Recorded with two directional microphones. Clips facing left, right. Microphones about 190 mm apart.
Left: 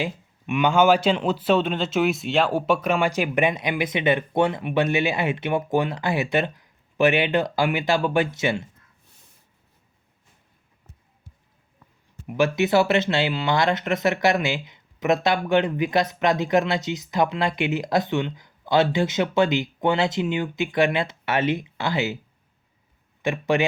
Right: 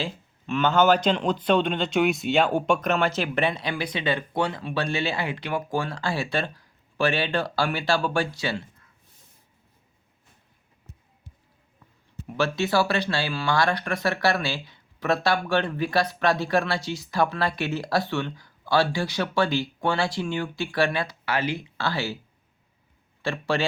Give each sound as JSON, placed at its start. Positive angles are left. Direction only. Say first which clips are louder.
{"t": 0.0, "sound": "speech", "louder": "left 3 dB", "side_deg": 15}
{"t": 12.3, "sound": "speech", "louder": "left 4 dB", "side_deg": 20}
{"t": 23.2, "sound": "speech", "louder": "left 4 dB", "side_deg": 20}